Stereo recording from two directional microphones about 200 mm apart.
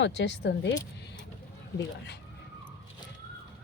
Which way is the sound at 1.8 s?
60° left (ahead or behind).